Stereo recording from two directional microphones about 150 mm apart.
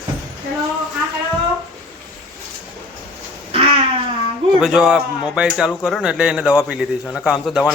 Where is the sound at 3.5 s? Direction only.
40° right (ahead or behind).